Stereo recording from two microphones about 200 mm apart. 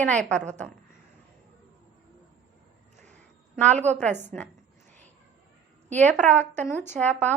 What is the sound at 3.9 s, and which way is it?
Speech, 5° left (ahead or behind).